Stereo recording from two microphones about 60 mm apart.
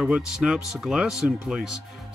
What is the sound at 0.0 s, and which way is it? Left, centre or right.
Speech, centre.